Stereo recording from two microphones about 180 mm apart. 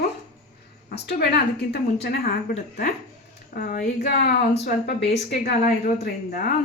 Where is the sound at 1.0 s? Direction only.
65° left (ahead or behind).